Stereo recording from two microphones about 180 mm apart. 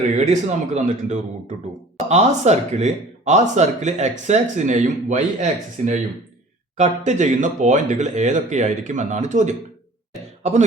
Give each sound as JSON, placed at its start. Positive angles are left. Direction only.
{"t": 0.2, "sound": "speech", "side_deg": -40}